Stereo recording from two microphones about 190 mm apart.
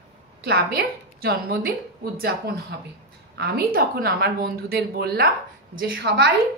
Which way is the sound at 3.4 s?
50° right (ahead or behind).